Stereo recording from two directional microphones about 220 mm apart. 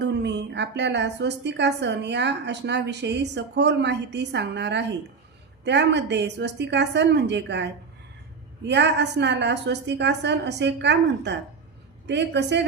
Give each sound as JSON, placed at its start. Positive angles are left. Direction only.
{"t": 0.0, "sound": "a woman's voice", "side_deg": -50}